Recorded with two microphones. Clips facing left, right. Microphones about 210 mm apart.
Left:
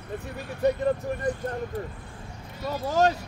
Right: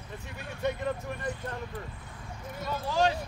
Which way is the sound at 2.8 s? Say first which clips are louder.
Left 4 dB; 45° left (ahead or behind).